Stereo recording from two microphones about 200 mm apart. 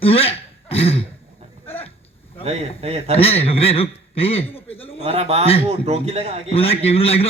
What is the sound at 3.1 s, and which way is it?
A man's voice, 30° left (ahead or behind).